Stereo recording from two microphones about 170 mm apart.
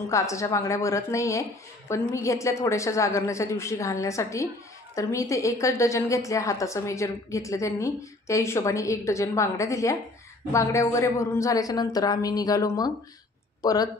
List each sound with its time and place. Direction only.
0.1 s a woman's voice: 20° left (ahead or behind)